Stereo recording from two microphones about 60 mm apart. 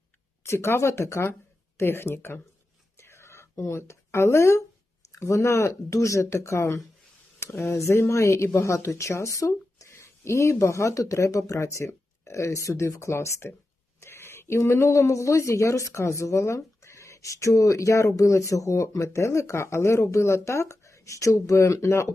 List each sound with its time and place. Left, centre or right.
0.4 s speech: left
3.0 s whispering: left
5.2 s speech: left